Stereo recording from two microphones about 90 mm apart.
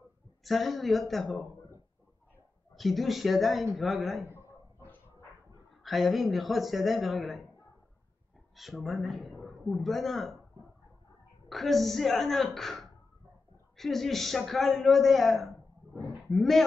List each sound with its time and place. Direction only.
0.4 s a man's voice: centre (ahead or behind)
2.7 s a man's voice: centre (ahead or behind)
4.2 s a sound: 30° right (ahead or behind)
4.7 s bow-wow: 25° left (ahead or behind)
5.9 s a man's voice: centre (ahead or behind)
8.5 s a man's voice: centre (ahead or behind)
11.4 s a man's voice: centre (ahead or behind)